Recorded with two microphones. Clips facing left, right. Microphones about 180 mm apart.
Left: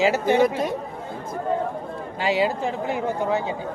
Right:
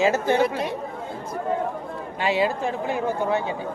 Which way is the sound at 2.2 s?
25° left (ahead or behind).